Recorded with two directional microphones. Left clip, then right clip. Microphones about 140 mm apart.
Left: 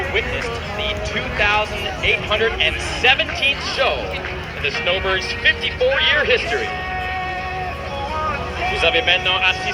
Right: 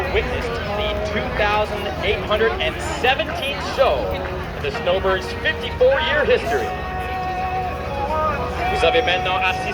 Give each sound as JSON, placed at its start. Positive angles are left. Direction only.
{"t": 1.1, "sound": "speech", "side_deg": -35}
{"t": 8.7, "sound": "speech", "side_deg": -90}